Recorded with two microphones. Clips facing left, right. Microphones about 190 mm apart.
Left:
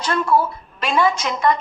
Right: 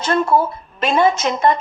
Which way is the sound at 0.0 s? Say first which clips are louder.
Right 2 dB; 25° right (ahead or behind).